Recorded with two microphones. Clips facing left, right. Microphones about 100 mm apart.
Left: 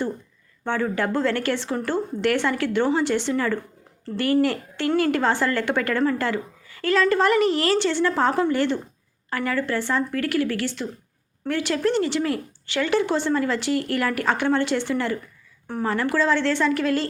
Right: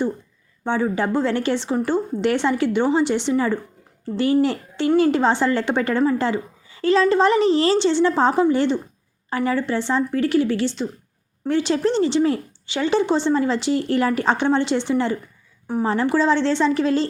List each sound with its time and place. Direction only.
0.6 s a woman's voice: 15° right (ahead or behind)